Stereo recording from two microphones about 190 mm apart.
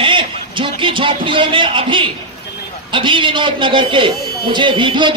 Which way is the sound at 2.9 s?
25° right (ahead or behind).